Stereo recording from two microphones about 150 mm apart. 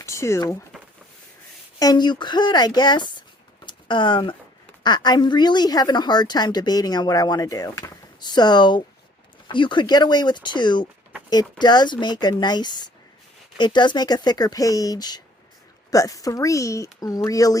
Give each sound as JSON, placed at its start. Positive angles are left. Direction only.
{"t": 0.0, "sound": "speech", "side_deg": 20}
{"t": 1.8, "sound": "a woman's voice", "side_deg": 25}